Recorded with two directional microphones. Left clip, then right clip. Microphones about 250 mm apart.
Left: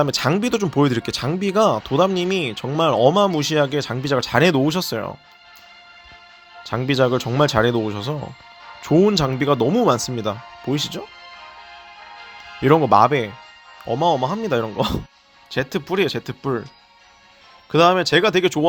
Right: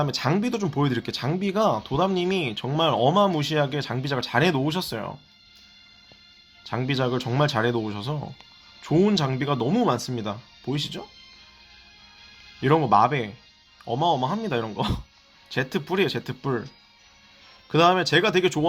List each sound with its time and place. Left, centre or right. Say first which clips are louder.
0.0 s speech: left 6 dB; left
6.7 s speech: left 7 dB; left
12.6 s speech: left 5 dB; left
17.7 s speech: left 4 dB; left